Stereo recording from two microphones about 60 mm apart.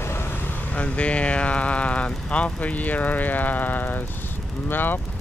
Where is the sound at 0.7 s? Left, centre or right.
Left.